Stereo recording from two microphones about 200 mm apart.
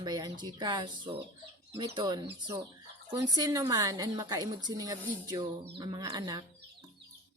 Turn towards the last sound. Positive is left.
turn(degrees=-20)  # may be behind; listen again after turning